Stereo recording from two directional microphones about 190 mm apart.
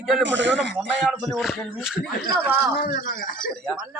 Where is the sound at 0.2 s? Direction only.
70° right (ahead or behind).